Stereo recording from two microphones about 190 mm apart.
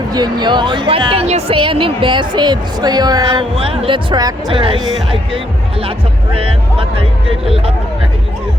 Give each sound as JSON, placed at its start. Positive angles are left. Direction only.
{"t": 0.1, "sound": "speech", "side_deg": -20}